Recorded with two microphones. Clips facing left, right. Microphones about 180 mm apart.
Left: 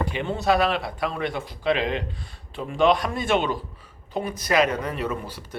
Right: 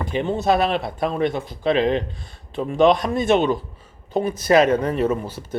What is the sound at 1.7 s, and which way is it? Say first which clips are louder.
Speech: right 6 dB; 40° right (ahead or behind).